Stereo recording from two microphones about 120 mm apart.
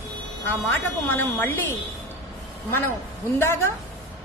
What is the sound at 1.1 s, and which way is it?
Speech, 20° left (ahead or behind).